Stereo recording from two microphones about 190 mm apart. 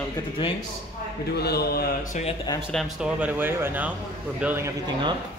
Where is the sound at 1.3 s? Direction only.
55° left (ahead or behind).